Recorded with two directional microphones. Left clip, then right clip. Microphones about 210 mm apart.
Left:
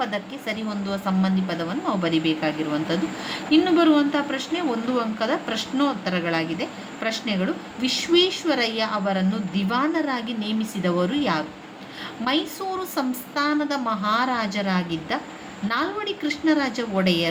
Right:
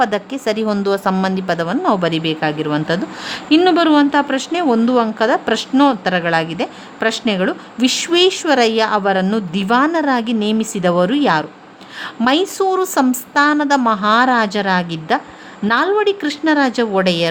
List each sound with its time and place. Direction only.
0.0 s a woman's voice: 55° right (ahead or behind)